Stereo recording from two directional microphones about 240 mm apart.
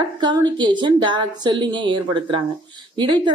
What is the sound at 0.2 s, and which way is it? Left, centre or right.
Speech, centre.